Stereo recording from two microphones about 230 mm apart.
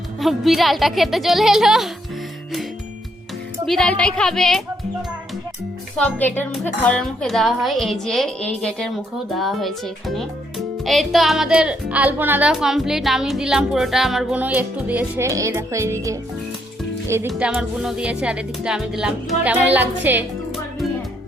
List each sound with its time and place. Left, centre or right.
0.2 s speech: centre
3.7 s speech: centre
6.0 s speech: centre